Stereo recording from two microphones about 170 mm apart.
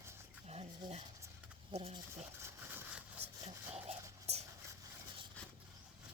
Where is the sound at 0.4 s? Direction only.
35° right (ahead or behind).